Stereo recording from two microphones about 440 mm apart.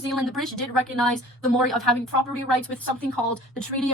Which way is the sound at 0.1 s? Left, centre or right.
Centre.